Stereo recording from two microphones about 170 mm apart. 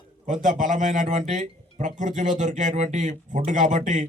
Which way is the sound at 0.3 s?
50° right (ahead or behind).